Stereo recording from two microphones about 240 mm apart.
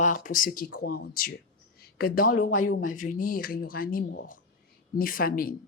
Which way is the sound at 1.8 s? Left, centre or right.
Left.